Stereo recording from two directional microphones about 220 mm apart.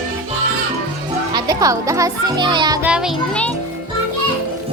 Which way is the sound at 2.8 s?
5° right (ahead or behind).